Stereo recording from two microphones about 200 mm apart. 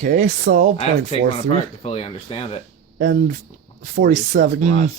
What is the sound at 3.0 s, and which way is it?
Speech, 45° right (ahead or behind).